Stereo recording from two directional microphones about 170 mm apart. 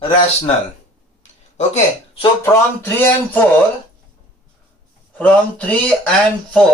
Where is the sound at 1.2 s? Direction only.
45° left (ahead or behind).